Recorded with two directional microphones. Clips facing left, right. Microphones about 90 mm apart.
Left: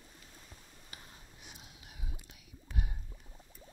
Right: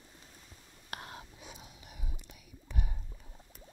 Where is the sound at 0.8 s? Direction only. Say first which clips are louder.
Right 12 dB; 75° right (ahead or behind).